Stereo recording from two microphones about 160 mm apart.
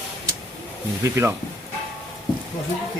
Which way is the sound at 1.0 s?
15° right (ahead or behind).